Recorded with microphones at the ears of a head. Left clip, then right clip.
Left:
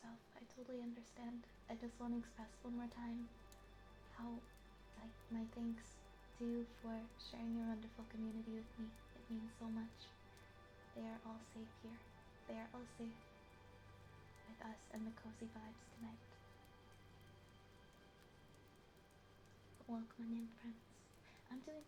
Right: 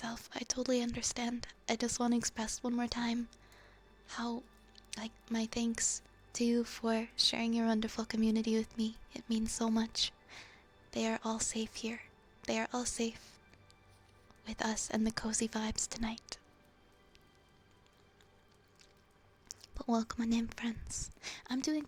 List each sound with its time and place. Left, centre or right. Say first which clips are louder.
0.0 s a woman's voice: right 18 dB; right
14.4 s speech: right 19 dB; right
19.5 s speech: right 17 dB; right